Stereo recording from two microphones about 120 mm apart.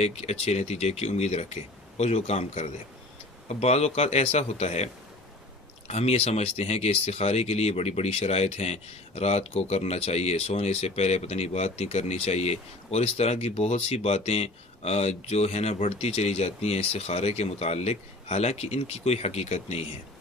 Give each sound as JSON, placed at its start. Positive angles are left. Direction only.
{"t": 0.0, "sound": "speech", "side_deg": 60}